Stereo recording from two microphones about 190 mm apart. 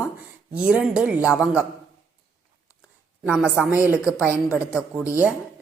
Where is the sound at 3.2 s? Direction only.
5° right (ahead or behind).